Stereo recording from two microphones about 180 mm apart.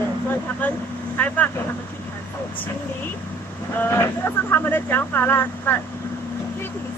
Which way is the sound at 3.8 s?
15° left (ahead or behind).